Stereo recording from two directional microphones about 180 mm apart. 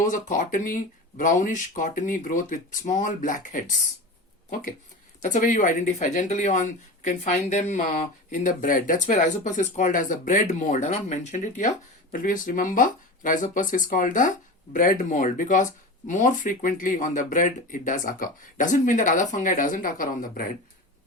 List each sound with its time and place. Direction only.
0.0 s speech: 45° left (ahead or behind)
5.2 s speech: 40° left (ahead or behind)